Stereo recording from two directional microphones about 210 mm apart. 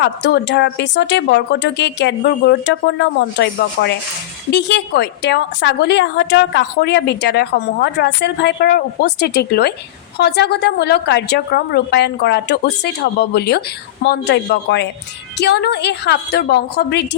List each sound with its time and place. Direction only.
0.0 s a woman's voice: 55° left (ahead or behind)